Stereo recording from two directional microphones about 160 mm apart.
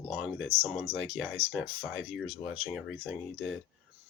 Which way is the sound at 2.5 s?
5° right (ahead or behind).